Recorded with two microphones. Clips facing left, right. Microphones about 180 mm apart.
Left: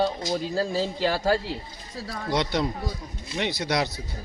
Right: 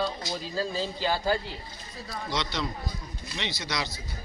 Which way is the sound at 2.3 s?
55° left (ahead or behind).